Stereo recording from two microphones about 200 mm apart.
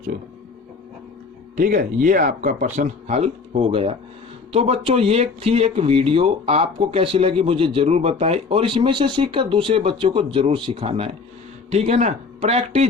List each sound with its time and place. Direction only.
1.5 s speech: 40° right (ahead or behind)